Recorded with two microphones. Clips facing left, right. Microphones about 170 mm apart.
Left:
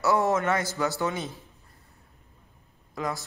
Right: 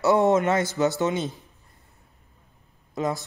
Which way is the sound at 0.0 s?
20° right (ahead or behind).